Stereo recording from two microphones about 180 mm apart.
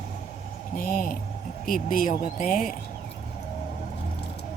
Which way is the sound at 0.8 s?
50° left (ahead or behind).